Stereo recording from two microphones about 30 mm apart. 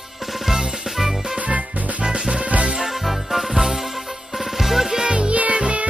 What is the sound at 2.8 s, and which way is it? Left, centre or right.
Music, centre.